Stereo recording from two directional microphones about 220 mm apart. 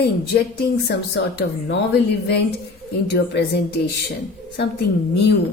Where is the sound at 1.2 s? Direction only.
50° left (ahead or behind).